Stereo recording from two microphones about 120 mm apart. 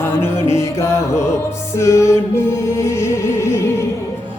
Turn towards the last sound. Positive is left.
turn(degrees=25)  # may be behind; listen again after turning